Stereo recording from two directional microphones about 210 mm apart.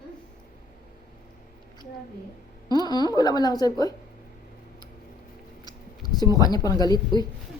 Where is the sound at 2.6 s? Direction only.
20° left (ahead or behind).